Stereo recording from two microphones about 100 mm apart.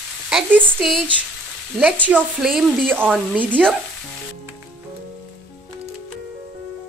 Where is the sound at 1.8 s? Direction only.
15° right (ahead or behind).